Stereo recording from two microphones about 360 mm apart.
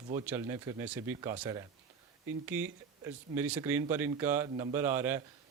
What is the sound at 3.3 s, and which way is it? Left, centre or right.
Speech, centre.